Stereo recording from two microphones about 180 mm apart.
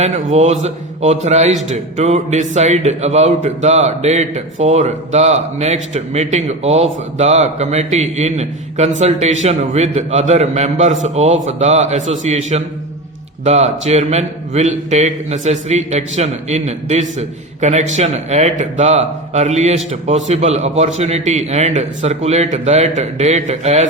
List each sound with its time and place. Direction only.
0.0 s a man's voice: 40° right (ahead or behind)